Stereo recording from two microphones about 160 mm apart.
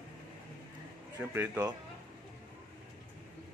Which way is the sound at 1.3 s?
10° right (ahead or behind).